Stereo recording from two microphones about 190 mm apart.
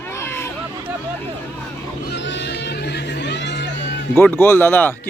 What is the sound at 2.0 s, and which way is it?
Neigh, 65° left (ahead or behind).